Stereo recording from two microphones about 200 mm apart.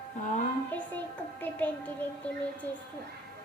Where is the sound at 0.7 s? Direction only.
10° left (ahead or behind).